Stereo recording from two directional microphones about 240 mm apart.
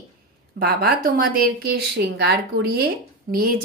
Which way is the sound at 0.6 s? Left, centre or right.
Right.